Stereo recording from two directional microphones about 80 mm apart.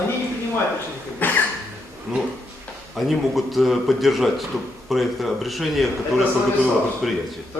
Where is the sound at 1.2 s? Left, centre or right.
Left.